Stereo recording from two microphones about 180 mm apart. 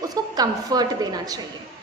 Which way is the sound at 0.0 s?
20° right (ahead or behind).